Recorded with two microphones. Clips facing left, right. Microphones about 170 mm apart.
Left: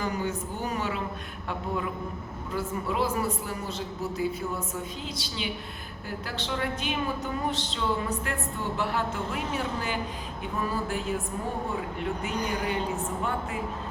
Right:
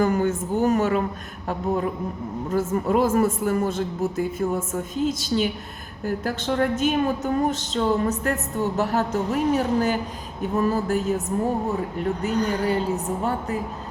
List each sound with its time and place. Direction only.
0.0 s a woman's voice: 50° right (ahead or behind)
12.2 s a woman's voice: 40° right (ahead or behind)